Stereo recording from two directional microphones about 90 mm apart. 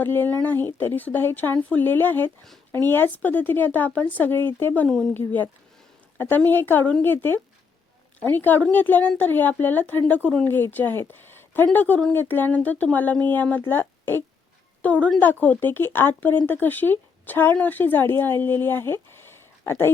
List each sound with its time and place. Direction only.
0.0 s a woman's voice: 20° left (ahead or behind)